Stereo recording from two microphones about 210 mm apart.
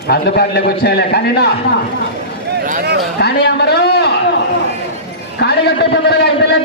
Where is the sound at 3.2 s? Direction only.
50° left (ahead or behind).